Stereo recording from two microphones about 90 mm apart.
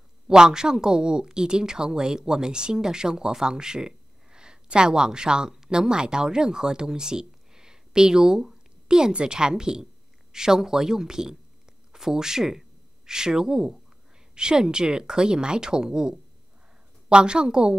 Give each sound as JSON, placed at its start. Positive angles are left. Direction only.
{"t": 0.3, "sound": "a woman's voice", "side_deg": -5}